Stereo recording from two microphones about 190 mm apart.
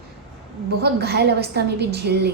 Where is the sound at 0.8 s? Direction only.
55° right (ahead or behind).